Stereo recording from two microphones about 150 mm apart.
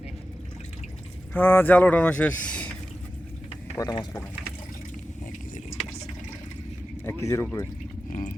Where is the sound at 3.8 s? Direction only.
25° left (ahead or behind).